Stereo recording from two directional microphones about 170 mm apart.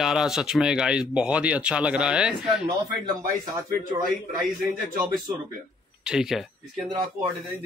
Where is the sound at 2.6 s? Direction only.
25° right (ahead or behind).